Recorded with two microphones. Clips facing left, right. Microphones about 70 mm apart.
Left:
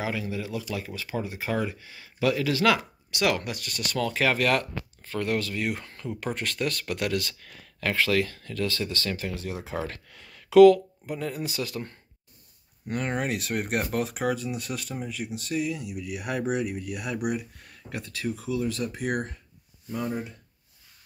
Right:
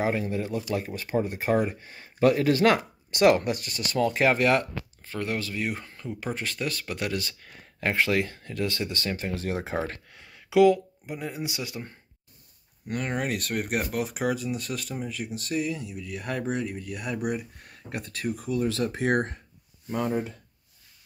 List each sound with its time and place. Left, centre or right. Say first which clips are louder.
0.0 s speech: right 4 dB; right
9.3 s speech: right 4 dB; right
9.8 s speech: right 1 dB; centre
12.8 s speech: left 1 dB; centre
17.6 s speech: right 1 dB; right
19.9 s speech: right 3 dB; right